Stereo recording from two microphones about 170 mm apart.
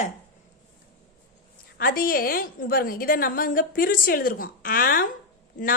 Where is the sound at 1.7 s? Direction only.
60° left (ahead or behind).